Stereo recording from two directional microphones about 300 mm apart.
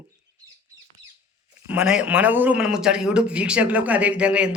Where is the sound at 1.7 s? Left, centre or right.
Centre.